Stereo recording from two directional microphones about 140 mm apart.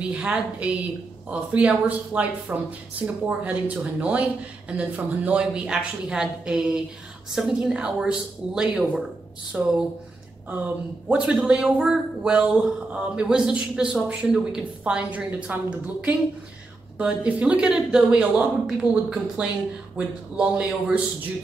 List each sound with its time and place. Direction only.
0.0 s a man's voice: 5° right (ahead or behind)
17.0 s a man's voice: 10° right (ahead or behind)
18.8 s speech: 30° left (ahead or behind)
19.4 s a man's voice: 10° right (ahead or behind)